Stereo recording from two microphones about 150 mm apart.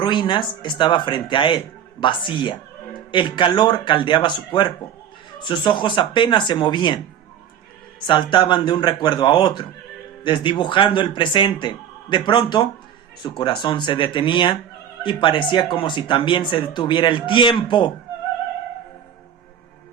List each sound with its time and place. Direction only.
0.0 s speech: 30° left (ahead or behind)